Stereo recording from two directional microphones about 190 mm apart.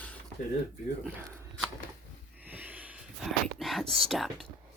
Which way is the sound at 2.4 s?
10° right (ahead or behind).